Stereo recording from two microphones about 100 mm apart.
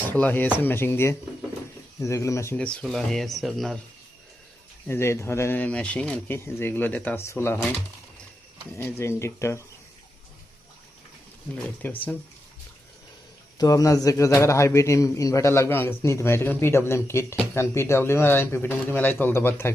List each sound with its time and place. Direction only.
0.1 s a man's voice: 20° left (ahead or behind)
2.6 s speech: 10° left (ahead or behind)
4.9 s a man's voice: 25° left (ahead or behind)
6.3 s a man's voice: 25° left (ahead or behind)
8.7 s a man's voice: 25° left (ahead or behind)
11.5 s speech: 15° left (ahead or behind)
13.6 s a man's voice: 35° left (ahead or behind)